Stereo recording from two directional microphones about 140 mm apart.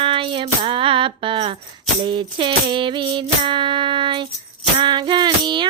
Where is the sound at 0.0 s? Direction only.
40° right (ahead or behind).